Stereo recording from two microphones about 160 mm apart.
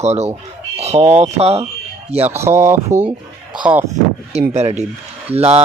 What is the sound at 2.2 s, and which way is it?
Speech, 15° right (ahead or behind).